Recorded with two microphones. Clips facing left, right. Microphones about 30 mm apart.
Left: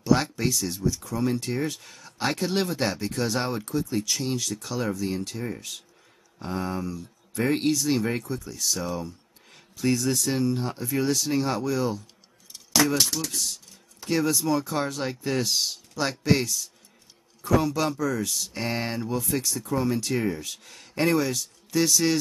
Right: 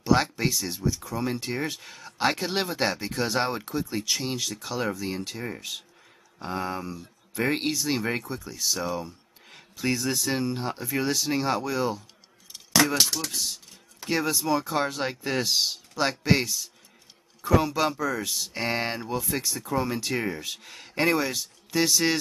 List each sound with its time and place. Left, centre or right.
0.0 s speech: centre
12.5 s keys jangling: centre
13.0 s speech: centre